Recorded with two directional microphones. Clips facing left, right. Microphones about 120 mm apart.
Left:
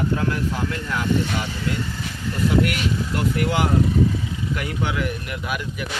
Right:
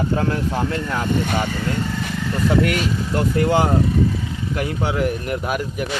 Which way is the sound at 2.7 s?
35° right (ahead or behind).